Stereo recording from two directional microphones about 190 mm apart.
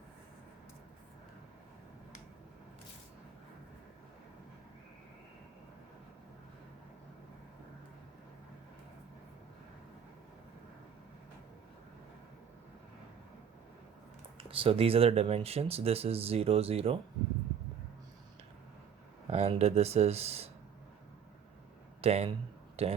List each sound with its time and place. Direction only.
14.3 s speech: 30° right (ahead or behind)
19.3 s speech: 35° right (ahead or behind)
22.0 s speech: 35° right (ahead or behind)